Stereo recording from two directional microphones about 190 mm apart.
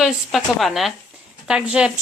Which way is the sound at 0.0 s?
Centre (ahead or behind).